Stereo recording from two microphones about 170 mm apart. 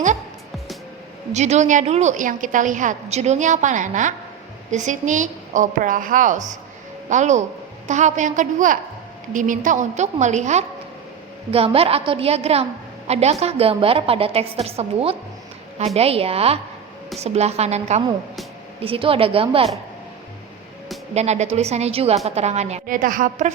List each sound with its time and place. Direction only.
1.3 s a woman's voice: 40° right (ahead or behind)
21.1 s a woman's voice: 40° right (ahead or behind)